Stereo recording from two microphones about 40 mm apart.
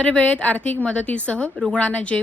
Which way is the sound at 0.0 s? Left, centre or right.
Left.